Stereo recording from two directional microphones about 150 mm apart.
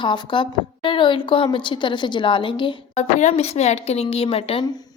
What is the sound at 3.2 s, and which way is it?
Speech, 45° left (ahead or behind).